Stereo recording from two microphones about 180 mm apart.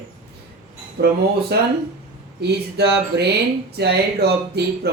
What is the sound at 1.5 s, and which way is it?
Speech, 65° right (ahead or behind).